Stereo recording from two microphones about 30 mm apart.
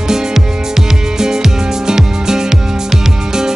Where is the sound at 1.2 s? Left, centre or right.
Centre.